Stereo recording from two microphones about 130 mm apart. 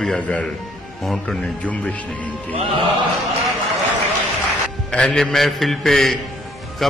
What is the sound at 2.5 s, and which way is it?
Music, 45° right (ahead or behind).